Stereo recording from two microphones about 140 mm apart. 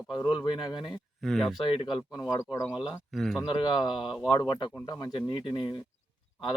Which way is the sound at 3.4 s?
35° left (ahead or behind).